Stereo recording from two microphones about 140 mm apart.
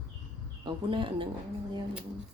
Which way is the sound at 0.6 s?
35° right (ahead or behind).